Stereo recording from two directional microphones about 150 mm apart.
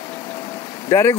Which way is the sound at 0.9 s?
15° left (ahead or behind).